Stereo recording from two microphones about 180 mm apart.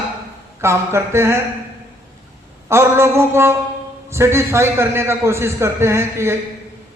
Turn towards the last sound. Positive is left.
turn(degrees=-15)  # may be behind; listen again after turning